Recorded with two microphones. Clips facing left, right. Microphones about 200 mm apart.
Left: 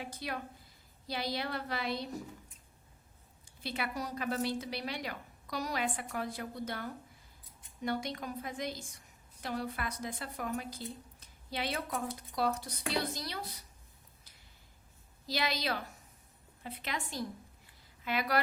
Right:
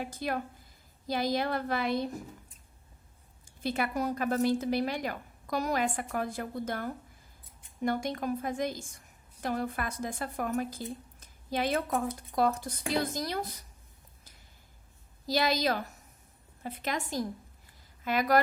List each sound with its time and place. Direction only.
0.0 s a woman's voice: 50° right (ahead or behind)
3.4 s a woman's voice: 45° right (ahead or behind)
15.3 s a woman's voice: 40° right (ahead or behind)